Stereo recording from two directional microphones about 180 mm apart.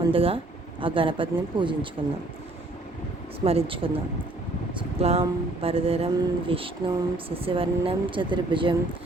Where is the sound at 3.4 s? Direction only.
35° right (ahead or behind).